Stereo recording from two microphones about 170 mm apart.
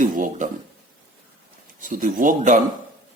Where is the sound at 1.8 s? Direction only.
50° right (ahead or behind).